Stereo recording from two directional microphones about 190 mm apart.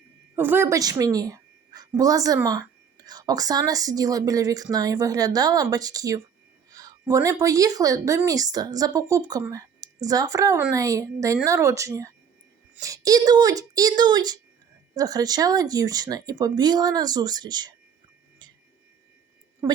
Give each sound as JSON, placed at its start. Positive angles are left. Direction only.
{"t": 0.3, "sound": "a woman's voice", "side_deg": -10}